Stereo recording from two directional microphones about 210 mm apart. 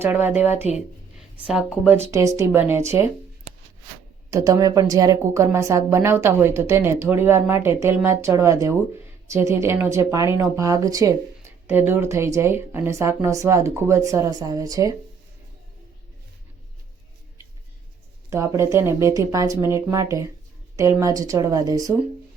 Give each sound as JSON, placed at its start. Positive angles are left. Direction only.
{"t": 0.0, "sound": "speech", "side_deg": -10}
{"t": 4.3, "sound": "speech", "side_deg": -15}
{"t": 18.3, "sound": "speech", "side_deg": -15}